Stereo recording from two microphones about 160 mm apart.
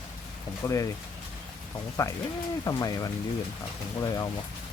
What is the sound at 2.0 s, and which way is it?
Speech, 20° left (ahead or behind).